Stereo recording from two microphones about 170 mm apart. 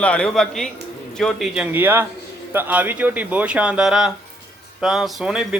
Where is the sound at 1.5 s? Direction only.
10° right (ahead or behind).